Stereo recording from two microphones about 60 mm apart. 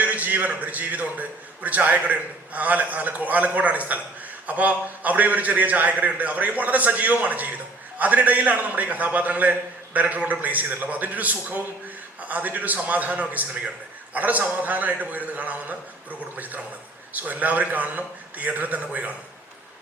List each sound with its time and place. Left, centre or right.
0.0 s a man's voice: right